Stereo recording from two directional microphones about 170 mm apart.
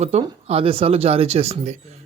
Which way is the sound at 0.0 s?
40° right (ahead or behind).